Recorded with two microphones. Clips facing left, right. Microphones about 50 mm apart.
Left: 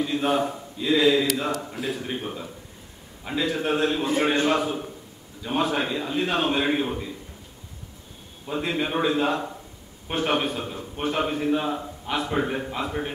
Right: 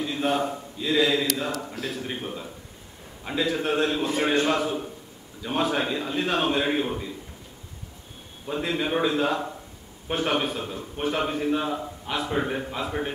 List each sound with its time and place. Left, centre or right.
0.0 s a sound: centre
0.5 s a man's voice: centre
4.0 s a man's voice: left
4.5 s a man's voice: centre
8.5 s a man's voice: centre